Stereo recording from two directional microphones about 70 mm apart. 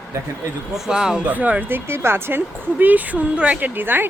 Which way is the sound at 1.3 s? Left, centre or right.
Right.